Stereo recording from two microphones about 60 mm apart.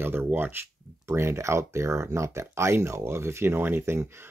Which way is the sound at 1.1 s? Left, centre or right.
Right.